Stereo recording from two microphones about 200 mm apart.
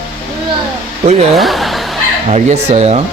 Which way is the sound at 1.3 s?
Centre (ahead or behind).